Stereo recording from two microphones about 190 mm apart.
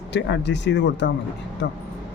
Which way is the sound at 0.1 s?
65° left (ahead or behind).